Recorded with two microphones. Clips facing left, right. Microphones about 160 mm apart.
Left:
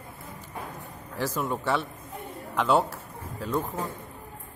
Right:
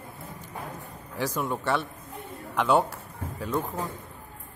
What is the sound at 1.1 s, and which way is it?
A man's voice, centre (ahead or behind).